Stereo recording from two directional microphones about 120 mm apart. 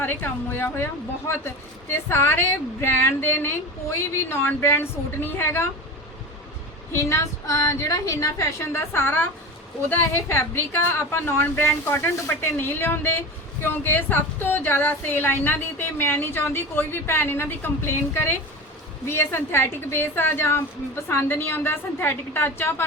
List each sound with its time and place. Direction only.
0.0 s a woman's voice: 15° left (ahead or behind)
6.9 s a woman's voice: 25° left (ahead or behind)